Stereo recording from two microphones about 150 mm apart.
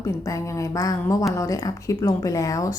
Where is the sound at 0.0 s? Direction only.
20° left (ahead or behind).